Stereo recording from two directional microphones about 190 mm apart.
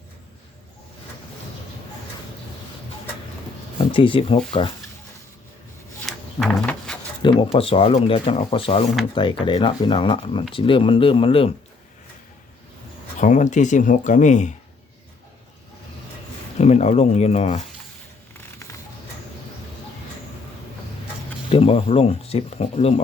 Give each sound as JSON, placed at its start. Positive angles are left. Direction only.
{"t": 3.8, "sound": "speech", "side_deg": 30}
{"t": 6.1, "sound": "a sound", "side_deg": 0}
{"t": 7.2, "sound": "speech", "side_deg": 25}
{"t": 13.1, "sound": "speech", "side_deg": 40}
{"t": 16.6, "sound": "speech", "side_deg": 35}
{"t": 21.5, "sound": "speech", "side_deg": 30}